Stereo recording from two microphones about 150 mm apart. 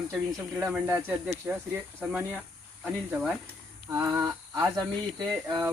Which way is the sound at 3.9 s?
15° right (ahead or behind).